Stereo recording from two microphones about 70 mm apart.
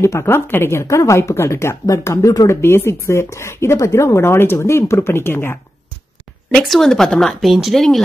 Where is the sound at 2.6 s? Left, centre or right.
Left.